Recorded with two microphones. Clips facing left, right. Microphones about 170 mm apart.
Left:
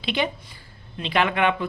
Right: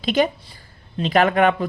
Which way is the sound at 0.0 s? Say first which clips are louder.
Right 6 dB; 45° right (ahead or behind).